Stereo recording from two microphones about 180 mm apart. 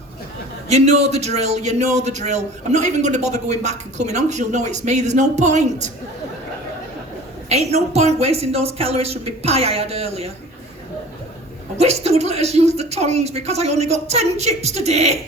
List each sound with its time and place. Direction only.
0.7 s speech: 35° right (ahead or behind)
7.5 s speech: 35° right (ahead or behind)
11.8 s speech: 35° right (ahead or behind)